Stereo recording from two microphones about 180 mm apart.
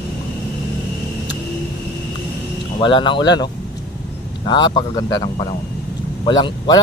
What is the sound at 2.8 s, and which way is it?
A man's voice, 25° left (ahead or behind).